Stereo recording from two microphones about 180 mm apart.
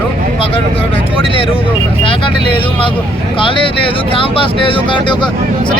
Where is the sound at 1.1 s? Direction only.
30° left (ahead or behind).